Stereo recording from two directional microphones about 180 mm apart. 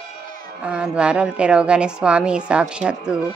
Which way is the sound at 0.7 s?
5° right (ahead or behind).